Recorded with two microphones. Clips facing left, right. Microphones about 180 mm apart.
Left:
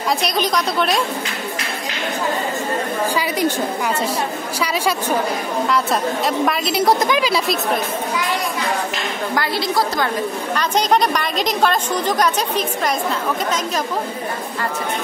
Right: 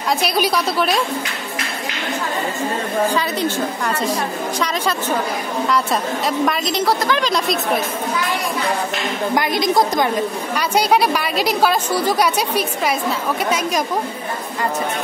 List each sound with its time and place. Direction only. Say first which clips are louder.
0.2 s a woman's voice: right 1 dB; 5° right (ahead or behind)
3.2 s a woman's voice: left 1 dB; 15° left (ahead or behind)
5.7 s a woman's voice: even; centre (ahead or behind)
6.9 s a woman's voice: left 2 dB; 20° left (ahead or behind)
7.2 s a woman's voice: left 1 dB; 5° left (ahead or behind)
9.3 s a woman's voice: right 4 dB; 15° right (ahead or behind)